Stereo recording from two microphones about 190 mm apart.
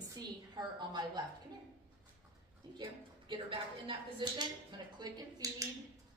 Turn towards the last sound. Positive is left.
turn(degrees=-20)  # may be behind; listen again after turning